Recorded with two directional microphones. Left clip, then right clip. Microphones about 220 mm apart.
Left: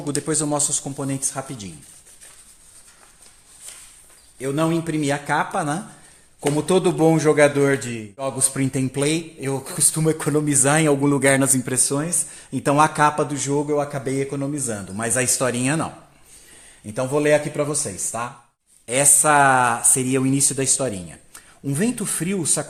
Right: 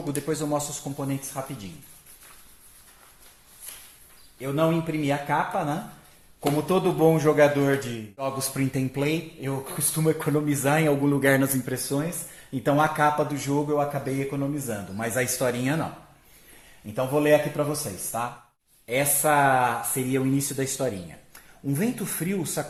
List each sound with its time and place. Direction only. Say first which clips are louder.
0.1 s speech: left 4 dB; 40° left (ahead or behind)
4.4 s a man's voice: left 2 dB; 50° left (ahead or behind)
16.9 s a man's voice: left 2 dB; 45° left (ahead or behind)